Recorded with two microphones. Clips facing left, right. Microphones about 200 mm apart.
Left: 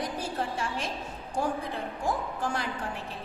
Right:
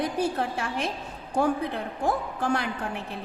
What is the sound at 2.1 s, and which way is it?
Speech, 65° right (ahead or behind).